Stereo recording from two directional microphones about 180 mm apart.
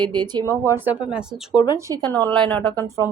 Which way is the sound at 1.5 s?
25° left (ahead or behind).